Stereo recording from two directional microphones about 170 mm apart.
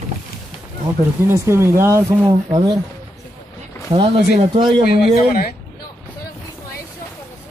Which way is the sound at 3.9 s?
35° right (ahead or behind).